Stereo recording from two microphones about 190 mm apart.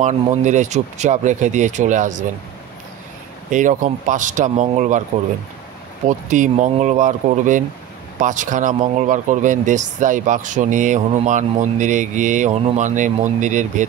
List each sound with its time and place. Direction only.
0.0 s speech: 40° right (ahead or behind)
3.4 s speech: 40° right (ahead or behind)
6.0 s speech: 40° right (ahead or behind)